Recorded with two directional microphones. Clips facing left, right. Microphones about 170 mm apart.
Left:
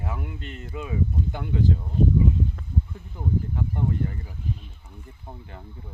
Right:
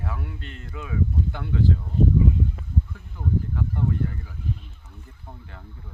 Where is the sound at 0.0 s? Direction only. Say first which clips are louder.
Left 1 dB; 15° left (ahead or behind).